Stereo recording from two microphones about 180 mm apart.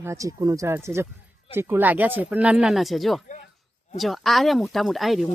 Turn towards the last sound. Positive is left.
turn(degrees=0)  # may be behind; listen again after turning